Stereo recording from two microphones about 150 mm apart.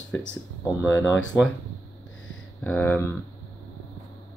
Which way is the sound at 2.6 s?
10° left (ahead or behind).